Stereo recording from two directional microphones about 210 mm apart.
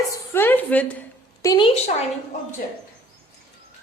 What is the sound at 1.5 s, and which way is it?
Speech, 25° left (ahead or behind).